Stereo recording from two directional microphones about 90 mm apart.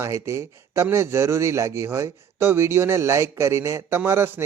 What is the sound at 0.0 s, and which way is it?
A man's voice, 30° right (ahead or behind).